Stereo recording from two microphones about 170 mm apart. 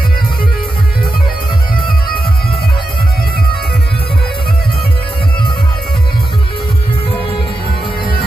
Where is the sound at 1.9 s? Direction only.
60° left (ahead or behind).